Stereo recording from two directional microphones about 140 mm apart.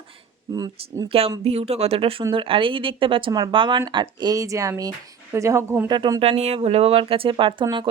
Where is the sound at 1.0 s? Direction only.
45° right (ahead or behind); by 5.9 s 15° right (ahead or behind).